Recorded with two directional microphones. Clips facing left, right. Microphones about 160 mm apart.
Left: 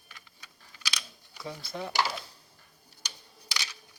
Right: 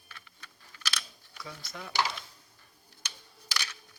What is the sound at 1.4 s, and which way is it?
Speech, 30° left (ahead or behind).